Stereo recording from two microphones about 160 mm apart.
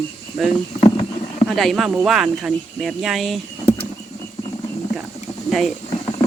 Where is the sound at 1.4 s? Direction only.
Centre (ahead or behind).